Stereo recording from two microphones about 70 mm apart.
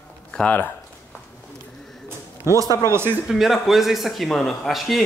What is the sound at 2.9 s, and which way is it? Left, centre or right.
Speech, right.